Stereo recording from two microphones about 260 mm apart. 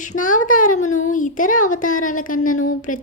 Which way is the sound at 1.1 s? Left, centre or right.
Left.